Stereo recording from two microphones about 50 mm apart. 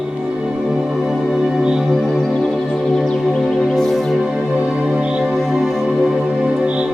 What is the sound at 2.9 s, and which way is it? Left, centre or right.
Music, centre.